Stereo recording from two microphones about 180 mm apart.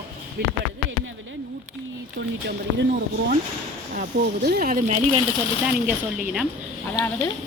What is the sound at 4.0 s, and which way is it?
Speech, 55° right (ahead or behind).